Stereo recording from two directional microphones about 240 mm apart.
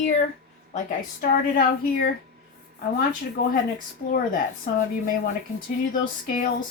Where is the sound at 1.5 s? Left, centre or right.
Left.